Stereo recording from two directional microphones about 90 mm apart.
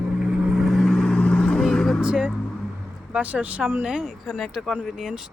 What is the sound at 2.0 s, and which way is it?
Vehicle, 10° right (ahead or behind).